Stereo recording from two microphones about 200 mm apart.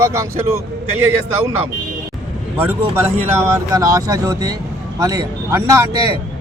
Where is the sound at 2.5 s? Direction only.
10° right (ahead or behind).